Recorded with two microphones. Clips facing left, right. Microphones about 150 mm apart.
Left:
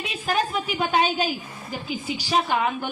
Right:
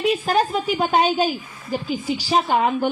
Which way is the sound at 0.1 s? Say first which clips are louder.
Right 5 dB; 40° right (ahead or behind).